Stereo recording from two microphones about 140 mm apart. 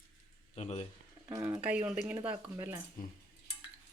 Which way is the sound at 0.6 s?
55° left (ahead or behind).